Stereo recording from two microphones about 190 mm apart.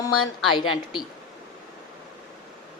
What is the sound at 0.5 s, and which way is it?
Speech, 25° left (ahead or behind).